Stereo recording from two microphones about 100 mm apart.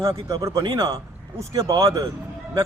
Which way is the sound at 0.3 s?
35° right (ahead or behind).